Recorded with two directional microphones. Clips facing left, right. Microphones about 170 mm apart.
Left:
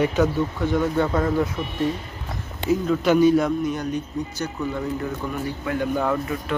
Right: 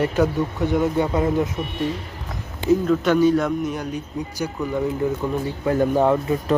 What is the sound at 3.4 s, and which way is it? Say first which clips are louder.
Speech: even; 5° right (ahead or behind).